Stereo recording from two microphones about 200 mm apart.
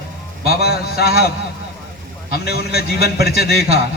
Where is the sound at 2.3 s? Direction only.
50° left (ahead or behind).